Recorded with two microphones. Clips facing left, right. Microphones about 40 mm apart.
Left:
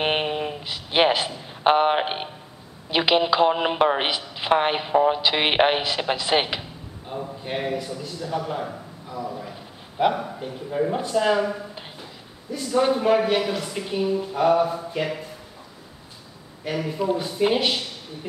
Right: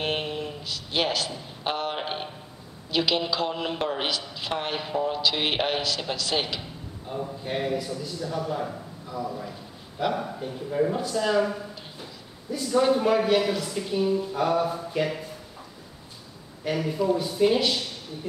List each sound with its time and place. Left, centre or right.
0.0 s a sound: left
1.6 s a woman's voice: left; by 8.3 s centre
8.3 s a woman's voice: left
10.1 s speech: centre
12.5 s a woman's voice: centre
16.6 s speech: centre
17.0 s a woman's voice: left